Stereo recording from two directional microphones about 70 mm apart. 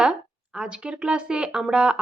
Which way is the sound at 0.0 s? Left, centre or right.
Centre.